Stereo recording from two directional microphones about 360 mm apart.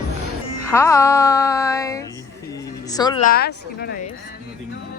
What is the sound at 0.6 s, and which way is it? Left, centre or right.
Music, centre.